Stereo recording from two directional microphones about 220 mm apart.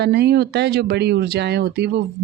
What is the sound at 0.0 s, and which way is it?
Speech, 45° right (ahead or behind).